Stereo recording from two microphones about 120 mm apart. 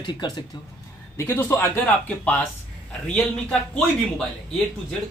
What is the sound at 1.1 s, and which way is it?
A man's voice, 20° left (ahead or behind).